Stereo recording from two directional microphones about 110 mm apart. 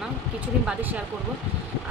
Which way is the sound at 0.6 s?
15° right (ahead or behind).